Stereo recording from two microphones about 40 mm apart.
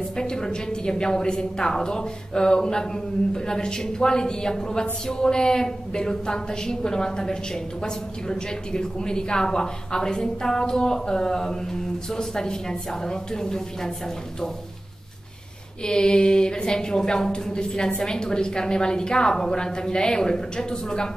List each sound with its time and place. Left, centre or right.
0.1 s a woman's voice: centre
15.8 s a woman's voice: left